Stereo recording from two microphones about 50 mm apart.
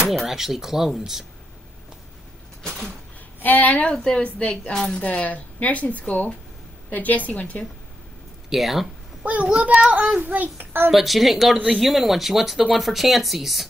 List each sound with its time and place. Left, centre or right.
0.1 s speech: centre
3.3 s speech: left
3.8 s a woman's voice: centre
8.5 s speech: centre
9.2 s a child's voice: right
10.9 s speech: centre
11.5 s speech: centre
11.8 s speech: centre